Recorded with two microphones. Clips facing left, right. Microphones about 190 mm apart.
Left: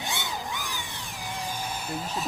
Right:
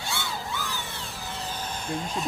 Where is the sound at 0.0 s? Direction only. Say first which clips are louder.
Even; 20° left (ahead or behind).